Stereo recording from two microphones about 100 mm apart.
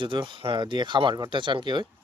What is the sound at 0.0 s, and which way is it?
Speech, 55° right (ahead or behind).